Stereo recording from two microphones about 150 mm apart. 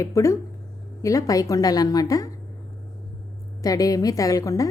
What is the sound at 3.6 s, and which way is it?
A woman's voice, 25° left (ahead or behind).